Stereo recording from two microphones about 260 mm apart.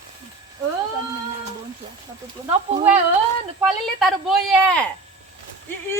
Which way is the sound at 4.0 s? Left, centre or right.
Centre.